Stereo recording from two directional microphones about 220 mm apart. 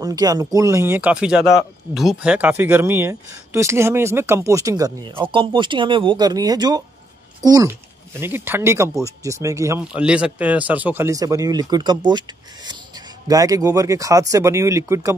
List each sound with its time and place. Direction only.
0.0 s speech: 15° right (ahead or behind)